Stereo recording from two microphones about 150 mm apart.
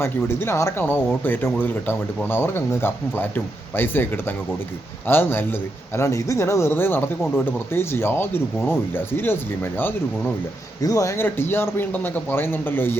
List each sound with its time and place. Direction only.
0.0 s speech: 15° left (ahead or behind)